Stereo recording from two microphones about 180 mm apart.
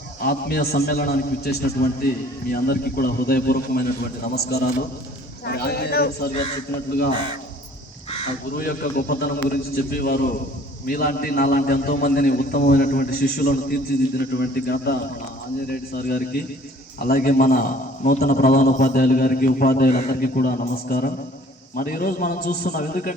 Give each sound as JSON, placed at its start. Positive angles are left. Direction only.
{"t": 0.2, "sound": "a man's voice", "side_deg": 60}
{"t": 8.5, "sound": "a man's voice", "side_deg": 55}